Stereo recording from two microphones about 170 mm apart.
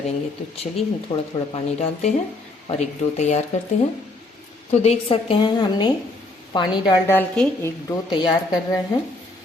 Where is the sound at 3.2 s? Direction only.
40° left (ahead or behind).